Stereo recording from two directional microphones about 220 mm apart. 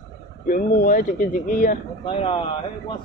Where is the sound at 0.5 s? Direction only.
40° left (ahead or behind).